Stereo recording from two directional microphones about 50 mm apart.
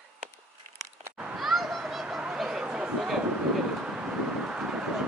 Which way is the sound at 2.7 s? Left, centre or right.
Right.